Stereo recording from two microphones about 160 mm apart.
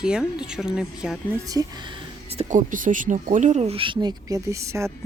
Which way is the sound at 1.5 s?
25° right (ahead or behind).